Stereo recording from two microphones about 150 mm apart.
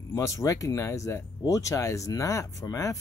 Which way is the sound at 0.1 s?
20° left (ahead or behind).